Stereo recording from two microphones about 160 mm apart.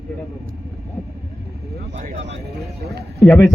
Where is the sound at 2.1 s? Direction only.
90° right.